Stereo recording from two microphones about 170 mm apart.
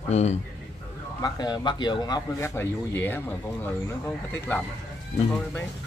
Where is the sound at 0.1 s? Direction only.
40° left (ahead or behind).